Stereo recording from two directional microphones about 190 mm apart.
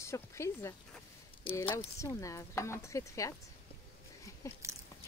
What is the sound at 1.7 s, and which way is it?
Speech, 15° left (ahead or behind).